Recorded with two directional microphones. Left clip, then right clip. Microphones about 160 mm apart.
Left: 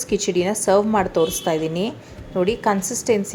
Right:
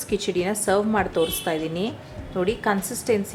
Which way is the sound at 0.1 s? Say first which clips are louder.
Left 3 dB; 15° left (ahead or behind).